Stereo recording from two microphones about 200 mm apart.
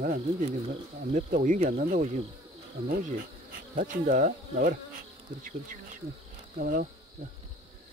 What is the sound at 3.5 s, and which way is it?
Bee, 40° right (ahead or behind).